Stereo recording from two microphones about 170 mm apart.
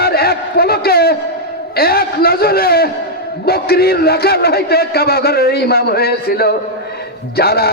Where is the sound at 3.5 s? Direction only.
65° left (ahead or behind).